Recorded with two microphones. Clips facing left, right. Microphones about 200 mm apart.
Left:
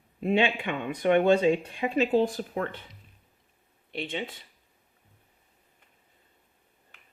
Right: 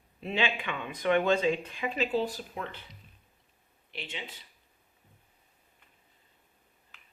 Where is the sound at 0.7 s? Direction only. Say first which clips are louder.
Left 3 dB; 55° left (ahead or behind).